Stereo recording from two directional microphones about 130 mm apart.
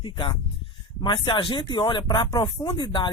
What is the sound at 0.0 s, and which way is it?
A woman's voice, 40° left (ahead or behind).